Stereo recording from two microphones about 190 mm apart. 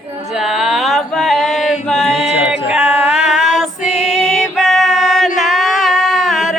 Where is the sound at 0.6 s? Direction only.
Centre (ahead or behind).